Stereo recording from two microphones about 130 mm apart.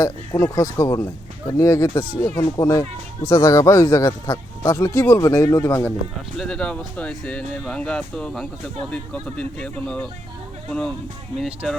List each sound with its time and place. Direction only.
0.0 s speech: 20° left (ahead or behind)
6.3 s speech: 5° left (ahead or behind)